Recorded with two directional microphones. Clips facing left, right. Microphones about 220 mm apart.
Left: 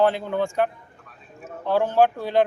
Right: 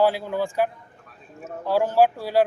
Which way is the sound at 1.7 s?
10° right (ahead or behind).